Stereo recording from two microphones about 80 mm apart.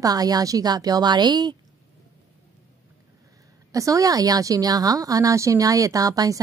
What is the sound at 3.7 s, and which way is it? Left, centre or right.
A woman's voice, right.